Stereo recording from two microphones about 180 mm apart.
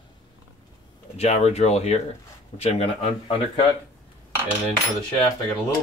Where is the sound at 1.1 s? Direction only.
35° left (ahead or behind).